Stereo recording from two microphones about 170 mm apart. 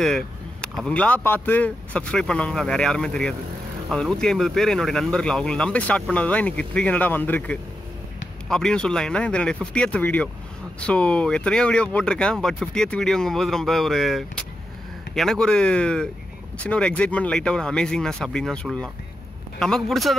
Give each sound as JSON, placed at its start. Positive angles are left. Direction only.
{"t": 0.0, "sound": "speech", "side_deg": 0}